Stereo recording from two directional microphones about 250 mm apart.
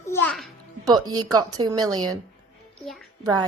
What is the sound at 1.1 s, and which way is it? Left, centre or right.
A woman's voice, centre.